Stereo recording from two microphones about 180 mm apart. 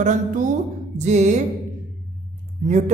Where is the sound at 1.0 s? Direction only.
40° right (ahead or behind).